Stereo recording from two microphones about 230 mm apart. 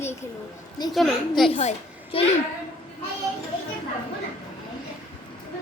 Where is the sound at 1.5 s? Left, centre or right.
Left.